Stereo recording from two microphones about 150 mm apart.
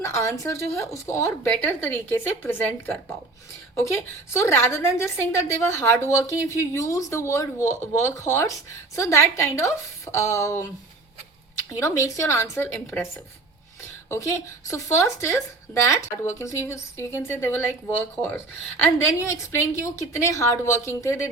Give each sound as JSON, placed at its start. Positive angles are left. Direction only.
{"t": 0.0, "sound": "a woman's voice", "side_deg": 20}
{"t": 11.8, "sound": "a woman's voice", "side_deg": 20}
{"t": 14.1, "sound": "a woman's voice", "side_deg": 20}